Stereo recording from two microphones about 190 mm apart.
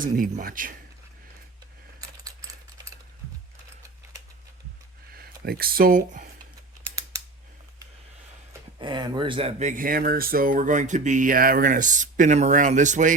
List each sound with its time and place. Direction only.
0.0 s speech: 45° right (ahead or behind)
5.1 s speech: 55° right (ahead or behind)
8.8 s speech: 25° right (ahead or behind); by 13.1 s 40° right (ahead or behind)